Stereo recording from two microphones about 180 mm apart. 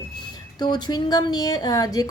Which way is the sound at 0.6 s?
25° left (ahead or behind).